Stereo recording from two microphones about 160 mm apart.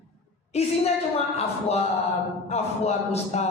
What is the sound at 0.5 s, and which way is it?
Speech, 40° left (ahead or behind).